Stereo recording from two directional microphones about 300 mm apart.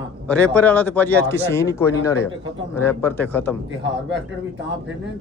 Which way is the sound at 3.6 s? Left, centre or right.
Right.